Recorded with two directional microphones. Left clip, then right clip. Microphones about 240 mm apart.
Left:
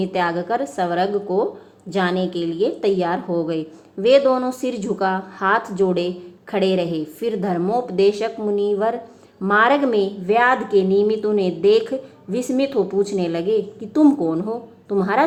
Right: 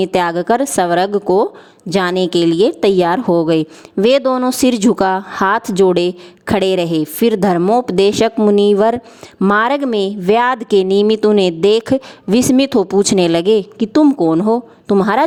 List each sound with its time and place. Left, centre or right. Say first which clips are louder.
0.0 s a woman's voice: right 6 dB; right
13.9 s speech: right 5 dB; right